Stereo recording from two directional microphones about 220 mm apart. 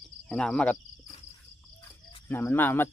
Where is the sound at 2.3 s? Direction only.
10° left (ahead or behind).